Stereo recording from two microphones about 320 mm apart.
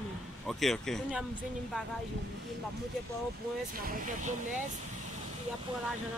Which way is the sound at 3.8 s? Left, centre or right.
Right.